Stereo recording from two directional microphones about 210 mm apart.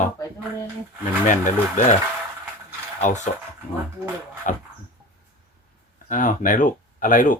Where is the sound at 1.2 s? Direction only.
35° left (ahead or behind).